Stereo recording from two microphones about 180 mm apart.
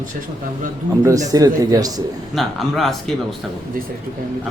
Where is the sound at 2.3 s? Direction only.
Centre (ahead or behind).